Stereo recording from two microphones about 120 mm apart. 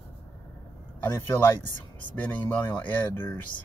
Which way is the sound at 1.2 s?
20° left (ahead or behind).